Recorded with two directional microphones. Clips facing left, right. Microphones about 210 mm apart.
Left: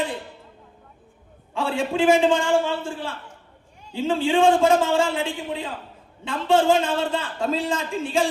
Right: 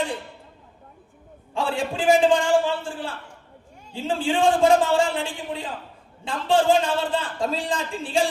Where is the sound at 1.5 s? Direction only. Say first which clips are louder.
Left 3 dB; 35° right (ahead or behind).